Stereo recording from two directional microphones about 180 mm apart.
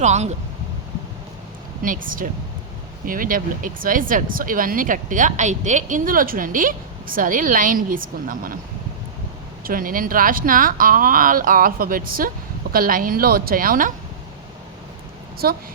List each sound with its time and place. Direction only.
0.0 s speech: 40° right (ahead or behind)
1.8 s a woman's voice: 50° right (ahead or behind)
9.6 s a woman's voice: 50° right (ahead or behind)
15.4 s a woman's voice: 55° right (ahead or behind)